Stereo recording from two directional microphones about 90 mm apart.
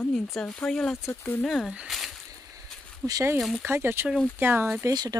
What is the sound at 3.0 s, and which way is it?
Speech, 40° right (ahead or behind).